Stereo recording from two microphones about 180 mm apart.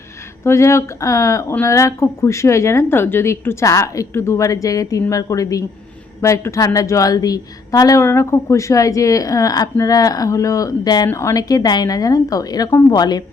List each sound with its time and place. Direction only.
0.4 s a woman's voice: 15° left (ahead or behind)